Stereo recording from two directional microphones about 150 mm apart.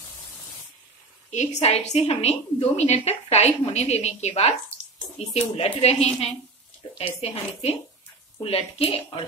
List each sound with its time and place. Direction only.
1.3 s a woman's voice: 50° left (ahead or behind)